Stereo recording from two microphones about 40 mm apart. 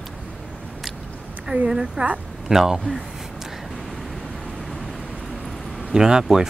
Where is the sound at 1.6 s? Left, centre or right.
Centre.